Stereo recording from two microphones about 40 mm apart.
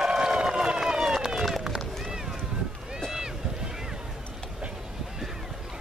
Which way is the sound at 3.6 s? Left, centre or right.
Centre.